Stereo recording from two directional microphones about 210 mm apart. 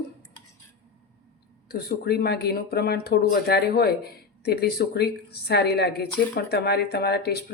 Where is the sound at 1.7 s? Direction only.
50° left (ahead or behind).